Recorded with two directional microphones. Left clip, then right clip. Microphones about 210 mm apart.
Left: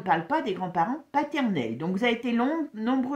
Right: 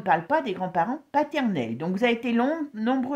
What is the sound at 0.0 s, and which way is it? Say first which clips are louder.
Speech: right 2 dB; 40° right (ahead or behind).